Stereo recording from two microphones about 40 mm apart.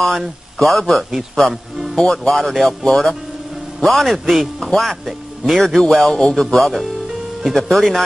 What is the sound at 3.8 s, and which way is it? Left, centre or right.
Speech, centre.